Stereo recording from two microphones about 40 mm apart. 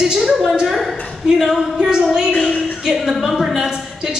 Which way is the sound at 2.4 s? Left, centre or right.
Left.